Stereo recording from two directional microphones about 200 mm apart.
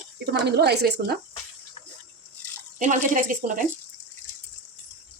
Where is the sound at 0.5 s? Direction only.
55° right (ahead or behind).